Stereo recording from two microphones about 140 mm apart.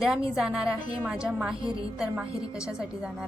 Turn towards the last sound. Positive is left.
turn(degrees=-5)  # may be behind; listen again after turning